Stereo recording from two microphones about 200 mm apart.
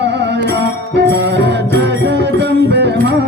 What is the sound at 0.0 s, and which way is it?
Music, 60° right (ahead or behind).